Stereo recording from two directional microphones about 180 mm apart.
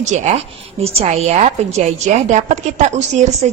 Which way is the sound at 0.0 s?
40° right (ahead or behind).